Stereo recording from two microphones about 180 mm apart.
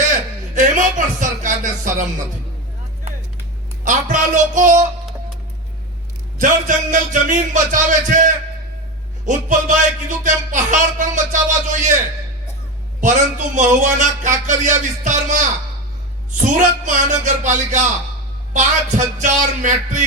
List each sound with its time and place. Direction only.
0.1 s a sound: 45° right (ahead or behind)
3.8 s speech: 45° right (ahead or behind)
6.4 s speech: 45° right (ahead or behind)
13.0 s speech: 45° right (ahead or behind)
16.5 s speech: 45° right (ahead or behind)
18.5 s music: 40° right (ahead or behind)